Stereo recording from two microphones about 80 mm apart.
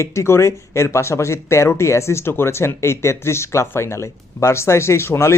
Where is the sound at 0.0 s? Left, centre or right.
Left.